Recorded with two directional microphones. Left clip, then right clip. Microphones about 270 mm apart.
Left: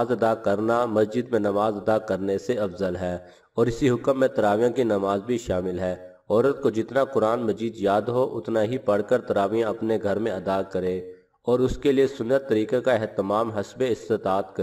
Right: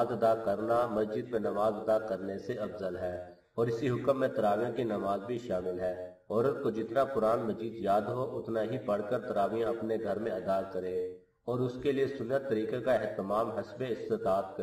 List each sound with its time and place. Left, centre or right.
0.0 s a man's voice: left